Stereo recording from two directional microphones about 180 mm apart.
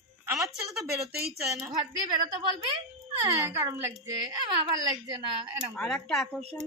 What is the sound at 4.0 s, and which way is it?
Speech, 25° right (ahead or behind).